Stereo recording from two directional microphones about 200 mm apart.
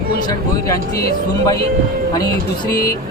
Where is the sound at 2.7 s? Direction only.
15° left (ahead or behind).